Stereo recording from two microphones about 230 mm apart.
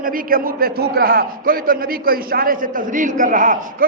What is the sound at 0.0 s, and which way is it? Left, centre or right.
A man's voice, right.